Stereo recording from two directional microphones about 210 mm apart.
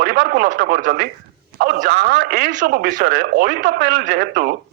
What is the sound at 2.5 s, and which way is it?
Speech, 40° right (ahead or behind).